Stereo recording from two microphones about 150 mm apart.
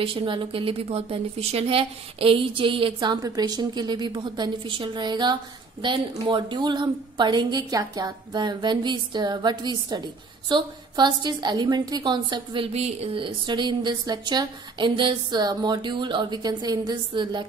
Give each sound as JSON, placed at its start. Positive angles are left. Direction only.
{"t": 0.0, "sound": "a woman's voice", "side_deg": -35}
{"t": 12.7, "sound": "a woman's voice", "side_deg": -45}